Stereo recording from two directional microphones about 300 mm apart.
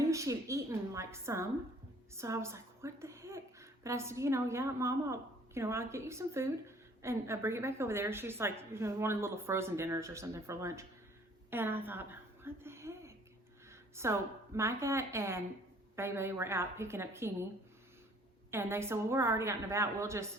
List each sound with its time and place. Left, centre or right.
0.1 s a sound: centre
2.1 s a woman's voice: centre
18.5 s a woman's voice: centre